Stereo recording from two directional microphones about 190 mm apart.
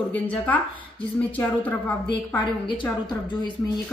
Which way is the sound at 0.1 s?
10° left (ahead or behind).